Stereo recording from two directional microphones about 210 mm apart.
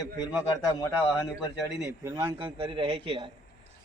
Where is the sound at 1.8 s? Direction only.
10° right (ahead or behind).